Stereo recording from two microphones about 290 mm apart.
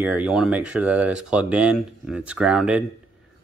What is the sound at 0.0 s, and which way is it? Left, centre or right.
Speech, centre.